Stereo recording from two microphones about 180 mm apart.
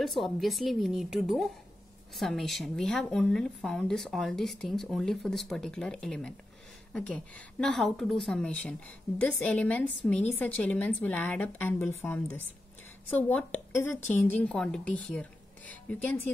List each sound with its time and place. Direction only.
0.0 s a woman's voice: centre (ahead or behind)